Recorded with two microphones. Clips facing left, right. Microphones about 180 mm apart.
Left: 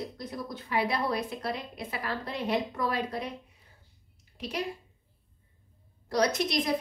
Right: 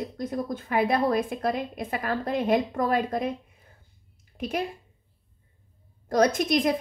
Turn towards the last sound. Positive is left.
turn(degrees=-50)  # may be behind; listen again after turning